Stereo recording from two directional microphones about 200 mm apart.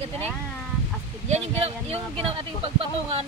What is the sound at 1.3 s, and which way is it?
Speech, 30° right (ahead or behind).